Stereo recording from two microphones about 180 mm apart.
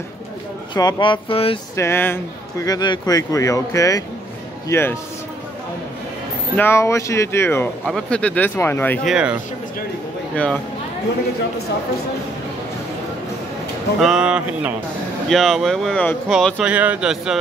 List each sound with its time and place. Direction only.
0.7 s speech: 25° left (ahead or behind)
1.8 s speech: 15° left (ahead or behind)
6.5 s speech: 15° left (ahead or behind)
7.8 s speech: 5° left (ahead or behind)
9.0 s speech: 5° right (ahead or behind)
10.3 s speech: 5° left (ahead or behind)
13.9 s speech: centre (ahead or behind)